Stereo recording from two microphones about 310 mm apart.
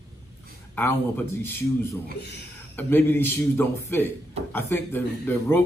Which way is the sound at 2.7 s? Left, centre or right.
Centre.